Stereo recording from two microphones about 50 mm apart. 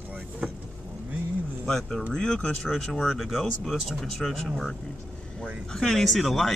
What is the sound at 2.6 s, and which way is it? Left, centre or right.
Speech, centre.